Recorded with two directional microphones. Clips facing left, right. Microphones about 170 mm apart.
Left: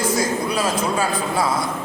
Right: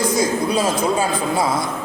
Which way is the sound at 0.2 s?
20° right (ahead or behind).